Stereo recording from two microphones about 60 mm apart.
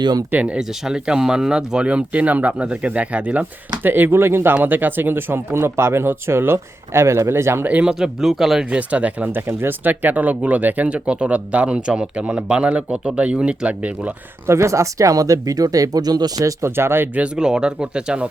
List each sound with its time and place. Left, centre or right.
0.3 s speech: right
0.9 s speech: centre
3.8 s speech: right
4.5 s speech: right
7.6 s speech: right
7.9 s speech: centre
8.7 s speech: right
14.4 s speech: right
16.6 s speech: right
17.2 s speech: centre